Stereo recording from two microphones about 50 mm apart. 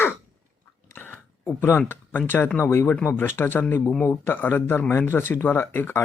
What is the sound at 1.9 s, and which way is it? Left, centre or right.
Speech, left.